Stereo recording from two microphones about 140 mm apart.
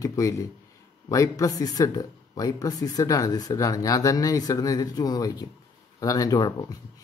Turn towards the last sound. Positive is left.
turn(degrees=25)  # may be behind; listen again after turning